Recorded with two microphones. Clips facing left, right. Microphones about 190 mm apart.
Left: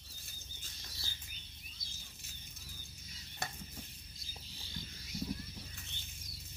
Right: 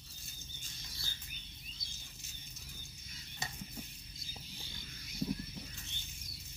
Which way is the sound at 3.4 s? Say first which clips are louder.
Left 3 dB; 60° left (ahead or behind).